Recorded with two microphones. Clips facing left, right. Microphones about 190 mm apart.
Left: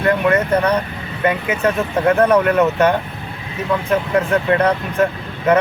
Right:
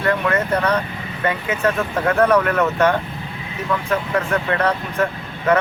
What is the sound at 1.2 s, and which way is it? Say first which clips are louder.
Speech: left 3 dB; 20° left (ahead or behind).